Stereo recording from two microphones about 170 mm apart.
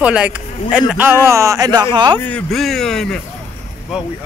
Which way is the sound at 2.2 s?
5° left (ahead or behind).